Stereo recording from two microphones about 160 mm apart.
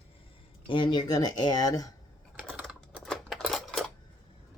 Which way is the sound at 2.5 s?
5° right (ahead or behind).